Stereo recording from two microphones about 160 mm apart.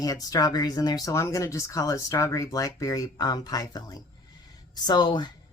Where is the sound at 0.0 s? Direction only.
25° left (ahead or behind).